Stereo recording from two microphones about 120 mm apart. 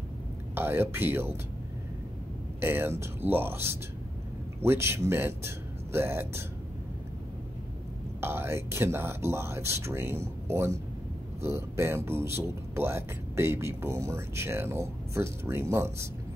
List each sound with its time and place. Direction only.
0.6 s speech: 20° right (ahead or behind)
2.6 s speech: 20° right (ahead or behind)
8.2 s speech: 20° right (ahead or behind)